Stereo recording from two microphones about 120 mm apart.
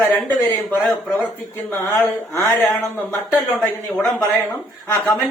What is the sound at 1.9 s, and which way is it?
Speech, 25° left (ahead or behind).